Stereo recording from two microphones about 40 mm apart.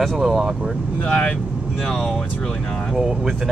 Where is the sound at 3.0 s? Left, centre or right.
Centre.